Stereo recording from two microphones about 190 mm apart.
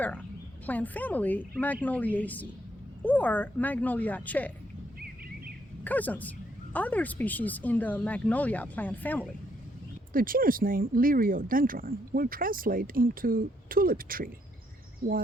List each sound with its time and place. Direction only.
0.6 s speech: 10° left (ahead or behind)
5.8 s speech: 10° left (ahead or behind)
10.1 s speech: 50° right (ahead or behind)